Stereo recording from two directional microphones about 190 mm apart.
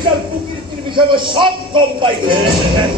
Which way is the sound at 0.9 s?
25° right (ahead or behind).